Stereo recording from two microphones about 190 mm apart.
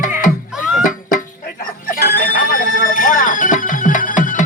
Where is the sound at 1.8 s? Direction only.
50° left (ahead or behind).